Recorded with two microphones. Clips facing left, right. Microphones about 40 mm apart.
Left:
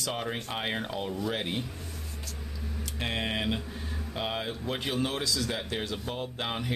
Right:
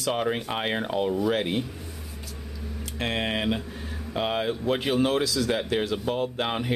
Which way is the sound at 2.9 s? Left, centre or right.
Right.